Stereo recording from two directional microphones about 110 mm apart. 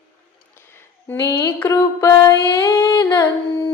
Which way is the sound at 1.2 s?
30° left (ahead or behind).